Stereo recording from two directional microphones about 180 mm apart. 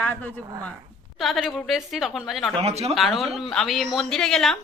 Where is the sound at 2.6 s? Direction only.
35° right (ahead or behind).